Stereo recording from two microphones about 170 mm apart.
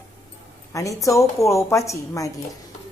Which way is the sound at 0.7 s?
20° left (ahead or behind).